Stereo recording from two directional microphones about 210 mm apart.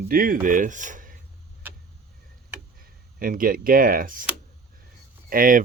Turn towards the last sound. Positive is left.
turn(degrees=-40)  # may be behind; listen again after turning